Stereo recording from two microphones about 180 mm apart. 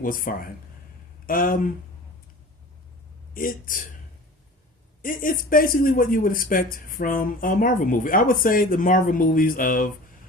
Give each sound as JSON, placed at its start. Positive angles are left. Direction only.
{"t": 0.0, "sound": "speech", "side_deg": 50}
{"t": 3.3, "sound": "speech", "side_deg": 50}
{"t": 5.0, "sound": "speech", "side_deg": 50}